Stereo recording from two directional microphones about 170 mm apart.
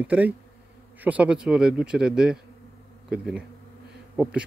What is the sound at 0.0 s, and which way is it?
Insect, 10° right (ahead or behind).